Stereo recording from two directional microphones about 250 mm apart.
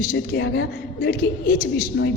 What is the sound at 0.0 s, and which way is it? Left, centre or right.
A woman's voice, left.